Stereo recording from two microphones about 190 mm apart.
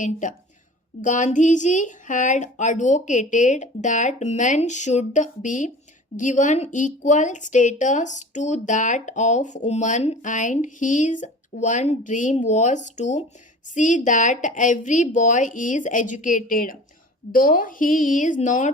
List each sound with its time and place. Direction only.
0.0 s a woman's voice: 40° left (ahead or behind)